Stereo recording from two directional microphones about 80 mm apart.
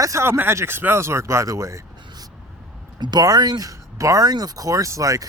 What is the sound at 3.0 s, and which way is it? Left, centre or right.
Speech, right.